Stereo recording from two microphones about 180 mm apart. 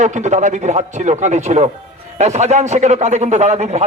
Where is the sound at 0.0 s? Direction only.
40° right (ahead or behind).